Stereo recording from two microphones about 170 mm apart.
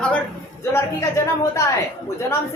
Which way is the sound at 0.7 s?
15° left (ahead or behind).